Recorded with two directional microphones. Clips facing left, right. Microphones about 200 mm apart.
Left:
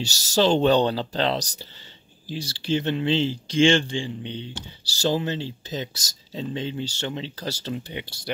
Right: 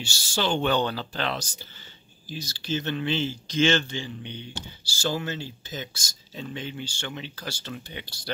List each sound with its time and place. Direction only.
0.0 s speech: 40° left (ahead or behind)
7.7 s speech: 25° left (ahead or behind)